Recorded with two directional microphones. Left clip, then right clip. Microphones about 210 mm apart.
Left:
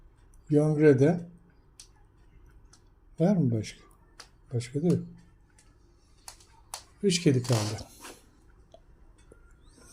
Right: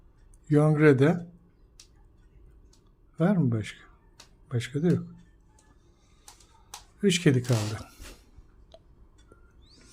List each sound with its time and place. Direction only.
0.5 s speech: 20° right (ahead or behind)
3.2 s speech: 10° right (ahead or behind)
4.4 s speech: 25° right (ahead or behind)
7.0 s speech: 15° right (ahead or behind)